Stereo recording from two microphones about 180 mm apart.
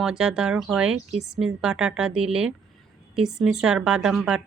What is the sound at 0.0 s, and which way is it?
Speech, 5° right (ahead or behind).